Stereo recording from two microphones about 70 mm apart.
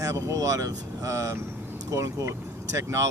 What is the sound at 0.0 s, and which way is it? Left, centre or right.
Speech, right.